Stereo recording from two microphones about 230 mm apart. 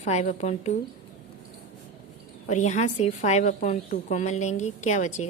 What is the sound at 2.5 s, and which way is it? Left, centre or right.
A woman's voice, left.